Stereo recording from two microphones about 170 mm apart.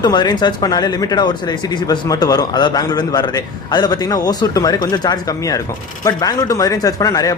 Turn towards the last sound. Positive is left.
turn(degrees=20)  # may be behind; listen again after turning